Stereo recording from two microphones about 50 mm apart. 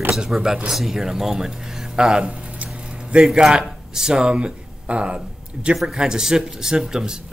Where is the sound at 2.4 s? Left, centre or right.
Right.